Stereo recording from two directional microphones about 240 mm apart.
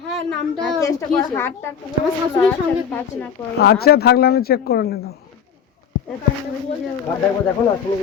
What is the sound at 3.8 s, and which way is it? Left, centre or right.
Speech, left.